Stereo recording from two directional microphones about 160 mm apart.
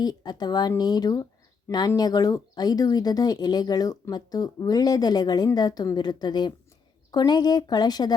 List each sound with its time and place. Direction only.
0.0 s speech: 25° left (ahead or behind)